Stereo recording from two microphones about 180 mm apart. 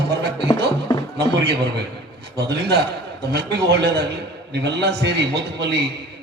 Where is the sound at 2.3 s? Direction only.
65° right (ahead or behind).